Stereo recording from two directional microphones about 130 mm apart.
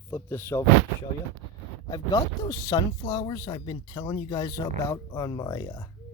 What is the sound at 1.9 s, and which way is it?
Speech, 30° left (ahead or behind).